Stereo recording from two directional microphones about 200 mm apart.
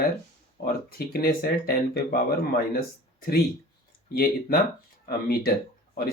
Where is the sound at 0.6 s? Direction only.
50° left (ahead or behind).